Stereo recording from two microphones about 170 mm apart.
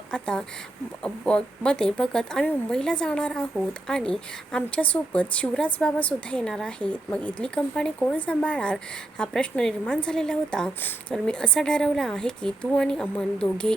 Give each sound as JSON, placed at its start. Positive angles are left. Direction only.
{"t": 0.1, "sound": "speech", "side_deg": 5}